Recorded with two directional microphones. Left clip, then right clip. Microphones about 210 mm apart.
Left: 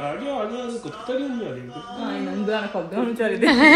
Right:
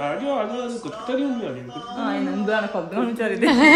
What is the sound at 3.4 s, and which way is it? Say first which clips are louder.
Speech: left 1 dB; 15° right (ahead or behind).